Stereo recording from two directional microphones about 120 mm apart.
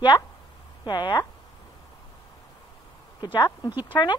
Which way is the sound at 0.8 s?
35° left (ahead or behind).